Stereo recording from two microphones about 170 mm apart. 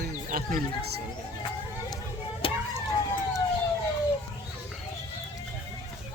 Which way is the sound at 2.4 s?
30° left (ahead or behind).